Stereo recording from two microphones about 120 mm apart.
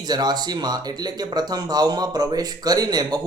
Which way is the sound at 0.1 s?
35° right (ahead or behind).